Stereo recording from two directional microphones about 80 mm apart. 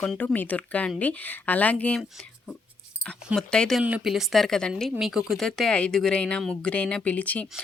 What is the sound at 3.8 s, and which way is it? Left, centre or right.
Speech, centre.